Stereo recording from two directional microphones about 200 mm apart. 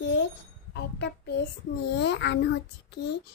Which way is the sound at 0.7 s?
60° left (ahead or behind).